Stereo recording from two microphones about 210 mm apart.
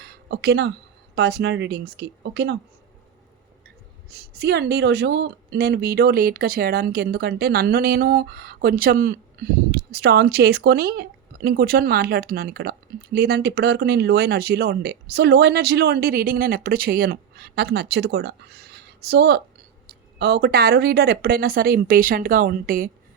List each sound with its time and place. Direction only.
0.0 s a sound: 50° right (ahead or behind)
1.1 s speech: 55° right (ahead or behind)
4.4 s speech: 50° right (ahead or behind)